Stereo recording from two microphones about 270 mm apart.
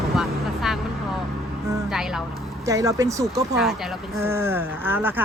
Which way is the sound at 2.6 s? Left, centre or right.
Centre.